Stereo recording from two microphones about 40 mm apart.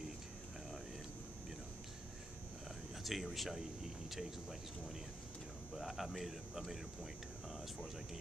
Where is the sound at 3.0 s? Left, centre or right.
Centre.